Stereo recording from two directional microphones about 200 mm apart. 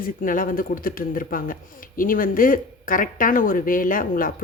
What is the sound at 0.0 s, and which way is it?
Speech, 45° left (ahead or behind).